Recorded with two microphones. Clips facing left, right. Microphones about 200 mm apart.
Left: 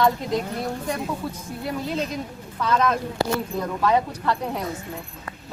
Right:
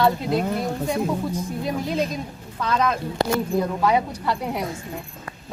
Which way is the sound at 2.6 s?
10° right (ahead or behind).